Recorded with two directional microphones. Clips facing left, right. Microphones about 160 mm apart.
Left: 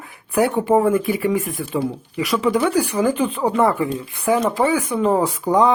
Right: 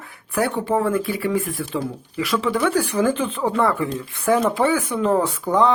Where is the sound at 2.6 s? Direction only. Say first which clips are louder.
Left 1 dB; centre (ahead or behind).